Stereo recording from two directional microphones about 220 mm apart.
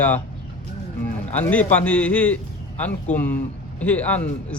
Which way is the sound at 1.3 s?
5° left (ahead or behind).